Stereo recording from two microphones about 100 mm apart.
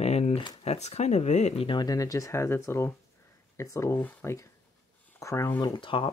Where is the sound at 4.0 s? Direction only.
15° left (ahead or behind).